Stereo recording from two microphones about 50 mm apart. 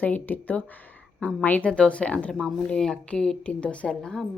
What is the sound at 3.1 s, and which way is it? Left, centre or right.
Speech, centre.